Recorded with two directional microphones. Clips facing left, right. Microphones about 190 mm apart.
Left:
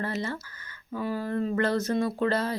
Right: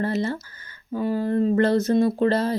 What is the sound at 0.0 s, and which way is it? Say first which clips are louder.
Speech: right 7 dB; 30° right (ahead or behind).